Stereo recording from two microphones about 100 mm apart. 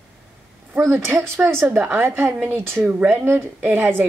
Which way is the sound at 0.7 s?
20° right (ahead or behind).